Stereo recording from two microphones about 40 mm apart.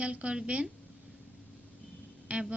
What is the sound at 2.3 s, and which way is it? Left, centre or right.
Music, right.